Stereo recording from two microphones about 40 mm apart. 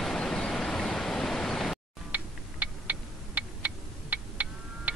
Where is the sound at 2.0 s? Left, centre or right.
Right.